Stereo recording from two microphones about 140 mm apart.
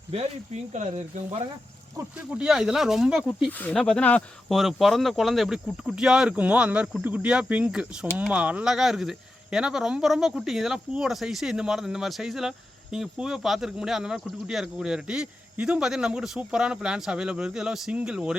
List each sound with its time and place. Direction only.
0.1 s speech: 50° right (ahead or behind)
2.0 s speech: 10° right (ahead or behind)
3.8 s speech: 5° left (ahead or behind)